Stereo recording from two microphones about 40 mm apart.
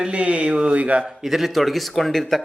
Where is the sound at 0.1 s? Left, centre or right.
Right.